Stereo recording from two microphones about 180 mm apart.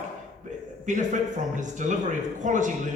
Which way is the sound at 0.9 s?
45° right (ahead or behind).